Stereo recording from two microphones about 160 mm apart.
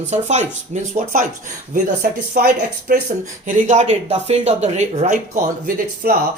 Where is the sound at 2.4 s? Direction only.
65° right (ahead or behind).